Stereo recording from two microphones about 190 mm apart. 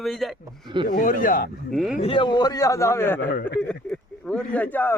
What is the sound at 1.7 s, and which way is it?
Speech, centre (ahead or behind).